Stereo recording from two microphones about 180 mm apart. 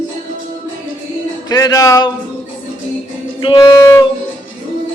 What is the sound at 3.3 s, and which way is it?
Music, 25° left (ahead or behind).